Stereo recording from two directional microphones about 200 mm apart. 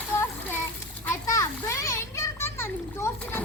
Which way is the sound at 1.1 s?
15° left (ahead or behind).